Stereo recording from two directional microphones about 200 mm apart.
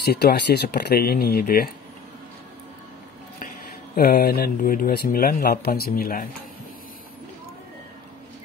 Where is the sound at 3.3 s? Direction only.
45° left (ahead or behind).